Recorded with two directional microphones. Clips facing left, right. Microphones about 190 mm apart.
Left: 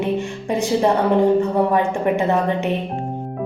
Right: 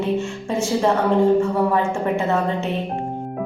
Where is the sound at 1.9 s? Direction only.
15° left (ahead or behind).